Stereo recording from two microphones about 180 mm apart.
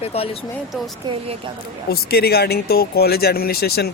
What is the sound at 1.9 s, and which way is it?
Speech, 60° left (ahead or behind).